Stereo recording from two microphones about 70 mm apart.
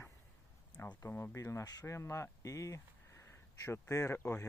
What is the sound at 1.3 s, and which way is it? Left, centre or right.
Speech, left.